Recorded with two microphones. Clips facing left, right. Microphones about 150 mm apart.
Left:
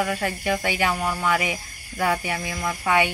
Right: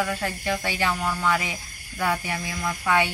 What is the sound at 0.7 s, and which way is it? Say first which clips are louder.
Speech: left 2 dB; 10° left (ahead or behind).